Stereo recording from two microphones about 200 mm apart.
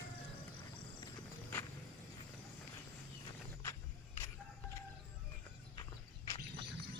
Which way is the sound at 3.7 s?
15° left (ahead or behind).